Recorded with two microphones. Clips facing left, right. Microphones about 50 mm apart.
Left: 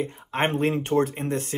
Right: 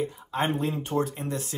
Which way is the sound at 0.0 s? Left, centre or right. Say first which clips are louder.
Left 2 dB; left.